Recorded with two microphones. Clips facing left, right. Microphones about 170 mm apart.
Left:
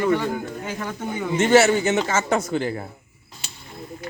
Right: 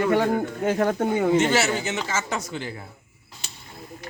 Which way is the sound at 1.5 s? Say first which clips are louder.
Left 7 dB; 50° left (ahead or behind).